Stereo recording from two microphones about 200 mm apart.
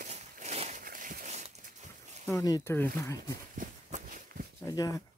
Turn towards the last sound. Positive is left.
turn(degrees=15)  # may be behind; listen again after turning